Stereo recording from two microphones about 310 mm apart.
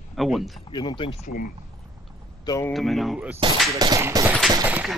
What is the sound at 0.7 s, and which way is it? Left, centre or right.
Speech, centre.